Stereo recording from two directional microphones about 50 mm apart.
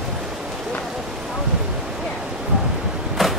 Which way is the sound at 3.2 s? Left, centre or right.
Centre.